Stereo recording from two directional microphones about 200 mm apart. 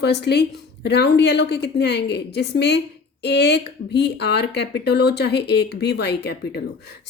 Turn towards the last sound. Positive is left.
turn(degrees=55)  # may be behind; listen again after turning